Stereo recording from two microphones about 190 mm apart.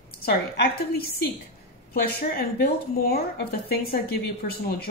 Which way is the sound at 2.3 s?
55° left (ahead or behind).